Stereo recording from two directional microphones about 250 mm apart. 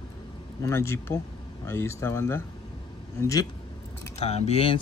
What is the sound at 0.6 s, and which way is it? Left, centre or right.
Speech, centre.